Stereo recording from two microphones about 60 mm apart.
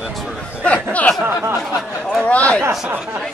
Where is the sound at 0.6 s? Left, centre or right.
Left.